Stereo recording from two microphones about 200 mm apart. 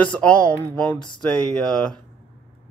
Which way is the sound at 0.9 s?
20° left (ahead or behind).